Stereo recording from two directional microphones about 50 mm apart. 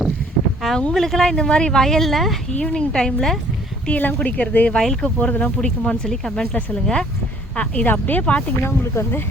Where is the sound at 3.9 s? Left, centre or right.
Left.